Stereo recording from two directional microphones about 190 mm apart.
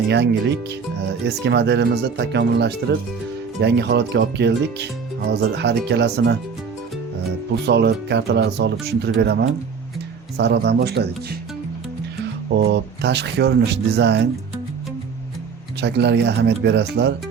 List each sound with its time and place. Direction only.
0.1 s speech: 65° right (ahead or behind)
7.7 s speech: 65° right (ahead or behind)
10.3 s speech: 65° right (ahead or behind)
12.5 s speech: 60° right (ahead or behind)
15.8 s speech: 65° right (ahead or behind)